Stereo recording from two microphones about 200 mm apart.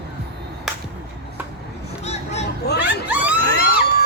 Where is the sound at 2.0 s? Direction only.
35° left (ahead or behind).